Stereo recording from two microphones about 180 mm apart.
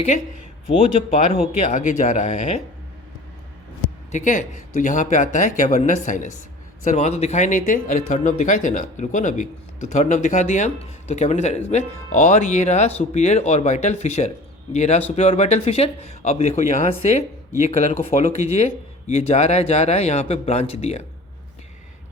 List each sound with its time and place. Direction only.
1.1 s speech: 40° left (ahead or behind)
3.8 s speech: 45° left (ahead or behind)